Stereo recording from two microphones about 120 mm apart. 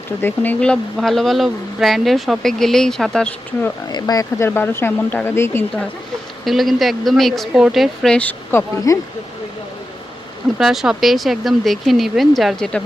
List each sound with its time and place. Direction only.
0.2 s speech: 15° left (ahead or behind)
3.8 s speech: 35° left (ahead or behind)
4.4 s speech: 20° left (ahead or behind)
6.4 s speech: centre (ahead or behind)
8.9 s speech: 30° left (ahead or behind)
10.6 s speech: 5° right (ahead or behind)